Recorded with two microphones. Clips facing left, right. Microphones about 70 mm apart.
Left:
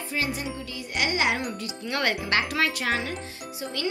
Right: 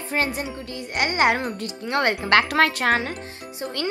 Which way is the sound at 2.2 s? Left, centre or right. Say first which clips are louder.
Right 7 dB; right.